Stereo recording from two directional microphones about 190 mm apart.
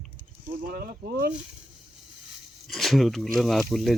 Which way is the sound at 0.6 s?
50° right (ahead or behind).